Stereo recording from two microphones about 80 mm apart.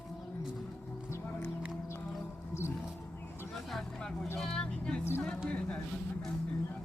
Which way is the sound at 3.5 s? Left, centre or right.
Centre.